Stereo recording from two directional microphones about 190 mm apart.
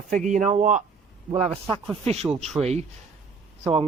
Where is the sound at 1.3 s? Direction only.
30° right (ahead or behind).